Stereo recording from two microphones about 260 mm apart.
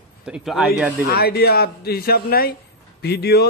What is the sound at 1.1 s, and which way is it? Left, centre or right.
A man's voice, left.